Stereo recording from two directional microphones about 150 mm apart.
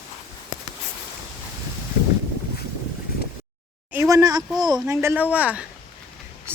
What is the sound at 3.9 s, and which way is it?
Speech, 20° right (ahead or behind).